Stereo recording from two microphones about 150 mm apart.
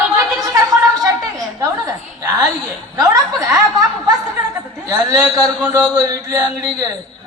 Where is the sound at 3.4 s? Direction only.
20° right (ahead or behind).